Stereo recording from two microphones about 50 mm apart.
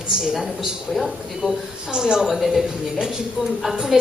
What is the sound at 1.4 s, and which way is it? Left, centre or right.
Speech, right.